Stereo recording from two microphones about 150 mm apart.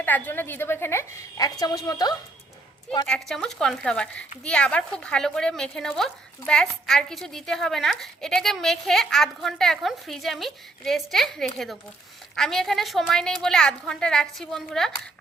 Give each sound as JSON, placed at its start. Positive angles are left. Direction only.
{"t": 0.0, "sound": "a woman's voice", "side_deg": 15}
{"t": 3.1, "sound": "speech", "side_deg": 5}